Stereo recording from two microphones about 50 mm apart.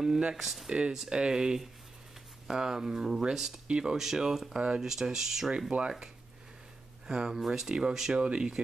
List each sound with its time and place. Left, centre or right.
0.4 s speech: centre
3.6 s speech: centre
3.9 s speech: centre
5.7 s speech: centre
7.1 s speech: centre